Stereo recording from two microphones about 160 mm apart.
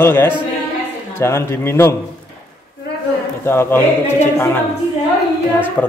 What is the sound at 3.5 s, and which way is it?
Speech, 15° left (ahead or behind).